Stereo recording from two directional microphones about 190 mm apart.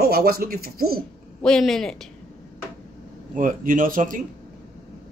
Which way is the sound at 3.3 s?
45° right (ahead or behind).